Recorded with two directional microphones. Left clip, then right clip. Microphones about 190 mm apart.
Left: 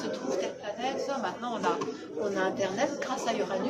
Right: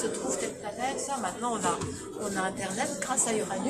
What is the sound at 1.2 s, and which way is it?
Speech, 15° right (ahead or behind).